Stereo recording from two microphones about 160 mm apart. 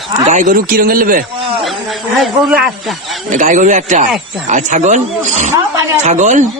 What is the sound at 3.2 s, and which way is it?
Speech, 55° right (ahead or behind).